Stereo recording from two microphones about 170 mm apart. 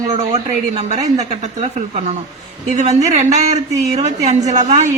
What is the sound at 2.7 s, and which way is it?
A woman's voice, 40° right (ahead or behind).